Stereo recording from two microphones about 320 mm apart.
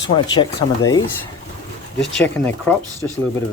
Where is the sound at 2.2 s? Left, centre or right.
Centre.